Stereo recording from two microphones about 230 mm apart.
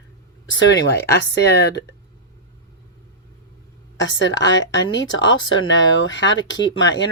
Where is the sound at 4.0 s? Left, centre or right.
Left.